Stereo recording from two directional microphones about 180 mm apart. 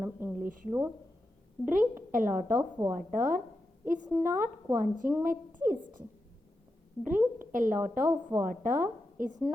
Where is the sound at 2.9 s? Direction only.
45° right (ahead or behind).